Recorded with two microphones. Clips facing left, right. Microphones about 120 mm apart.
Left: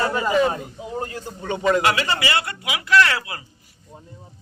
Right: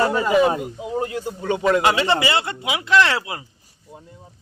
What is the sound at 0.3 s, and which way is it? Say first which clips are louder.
Speech: right 3 dB; 10° right (ahead or behind).